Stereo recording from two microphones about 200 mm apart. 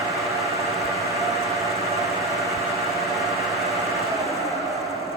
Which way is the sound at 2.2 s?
Centre (ahead or behind).